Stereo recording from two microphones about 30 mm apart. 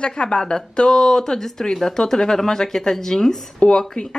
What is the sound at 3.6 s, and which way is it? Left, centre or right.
Speech, left.